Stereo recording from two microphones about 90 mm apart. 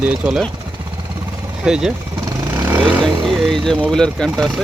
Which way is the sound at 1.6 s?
10° right (ahead or behind).